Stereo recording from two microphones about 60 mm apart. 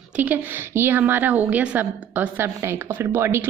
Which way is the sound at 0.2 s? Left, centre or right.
Right.